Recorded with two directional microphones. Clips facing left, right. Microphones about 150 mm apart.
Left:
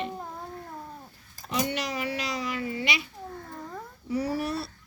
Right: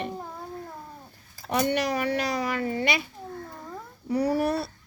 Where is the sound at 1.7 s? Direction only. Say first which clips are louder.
Right 6 dB; 55° right (ahead or behind).